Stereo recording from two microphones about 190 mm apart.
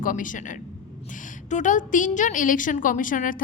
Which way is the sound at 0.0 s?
45° left (ahead or behind).